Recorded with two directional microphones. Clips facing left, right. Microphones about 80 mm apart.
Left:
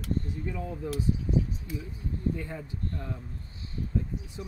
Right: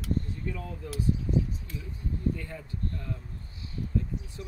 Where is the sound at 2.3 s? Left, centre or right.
Centre.